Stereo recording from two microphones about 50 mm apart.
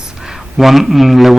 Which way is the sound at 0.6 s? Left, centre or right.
Centre.